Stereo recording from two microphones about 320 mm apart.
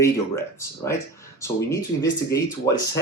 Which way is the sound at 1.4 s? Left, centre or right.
Centre.